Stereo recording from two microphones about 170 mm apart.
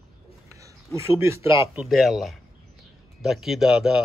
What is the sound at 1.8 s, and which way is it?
Speech, centre (ahead or behind).